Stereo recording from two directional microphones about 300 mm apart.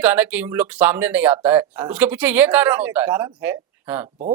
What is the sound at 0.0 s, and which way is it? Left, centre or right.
Speech, centre.